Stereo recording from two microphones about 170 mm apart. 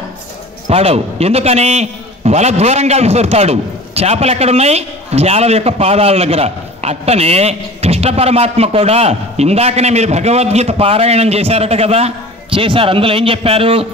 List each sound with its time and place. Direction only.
0.7 s a man's voice: 35° right (ahead or behind)